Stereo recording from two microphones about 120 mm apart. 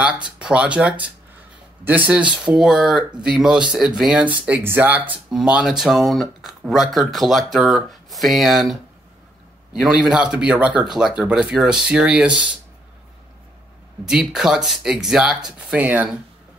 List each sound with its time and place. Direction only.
0.4 s speech: 10° right (ahead or behind)
9.8 s speech: 5° right (ahead or behind)
14.0 s speech: 5° right (ahead or behind)